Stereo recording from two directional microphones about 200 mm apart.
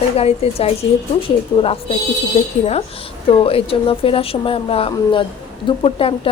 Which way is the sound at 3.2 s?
30° left (ahead or behind).